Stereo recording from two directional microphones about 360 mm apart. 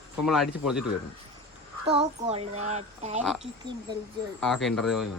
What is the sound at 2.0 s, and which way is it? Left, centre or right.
Speech, centre.